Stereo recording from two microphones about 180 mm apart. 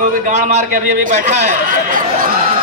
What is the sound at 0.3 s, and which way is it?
A man's voice, 40° right (ahead or behind).